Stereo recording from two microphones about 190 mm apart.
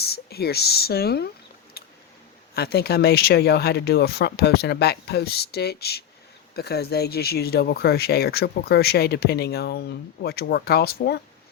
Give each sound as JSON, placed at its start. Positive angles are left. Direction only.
{"t": 0.0, "sound": "speech", "side_deg": 55}
{"t": 2.6, "sound": "speech", "side_deg": 55}